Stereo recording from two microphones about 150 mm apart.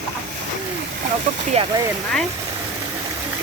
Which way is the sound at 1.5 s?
45° right (ahead or behind).